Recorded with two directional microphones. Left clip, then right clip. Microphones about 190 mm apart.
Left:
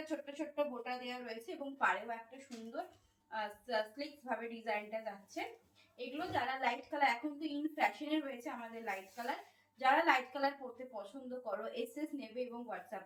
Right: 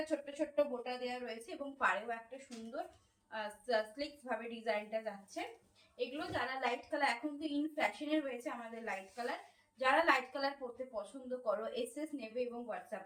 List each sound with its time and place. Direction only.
0.1 s a woman's voice: 15° right (ahead or behind)